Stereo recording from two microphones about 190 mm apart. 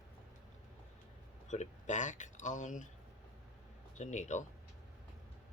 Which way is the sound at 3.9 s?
40° left (ahead or behind).